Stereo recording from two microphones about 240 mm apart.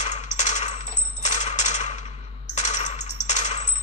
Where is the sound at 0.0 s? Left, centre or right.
Left.